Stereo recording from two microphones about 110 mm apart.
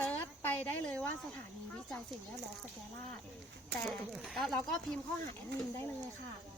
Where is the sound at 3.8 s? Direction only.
5° left (ahead or behind).